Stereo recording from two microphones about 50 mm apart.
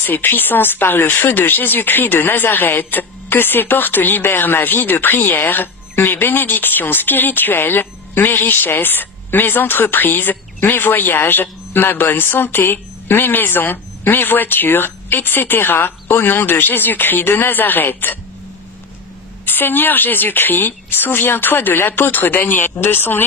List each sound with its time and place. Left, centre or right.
0.0 s speech: left
19.4 s speech: left